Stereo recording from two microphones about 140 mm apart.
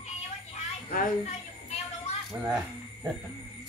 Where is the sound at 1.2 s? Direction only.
50° left (ahead or behind).